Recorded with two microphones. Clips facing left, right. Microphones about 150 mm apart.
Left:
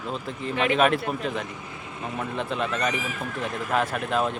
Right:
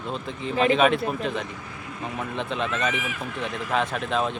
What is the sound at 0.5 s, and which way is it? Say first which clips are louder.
Speech: right 4 dB; 35° right (ahead or behind).